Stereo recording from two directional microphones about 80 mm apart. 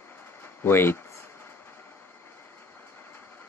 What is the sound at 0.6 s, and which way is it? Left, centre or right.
Speech, left.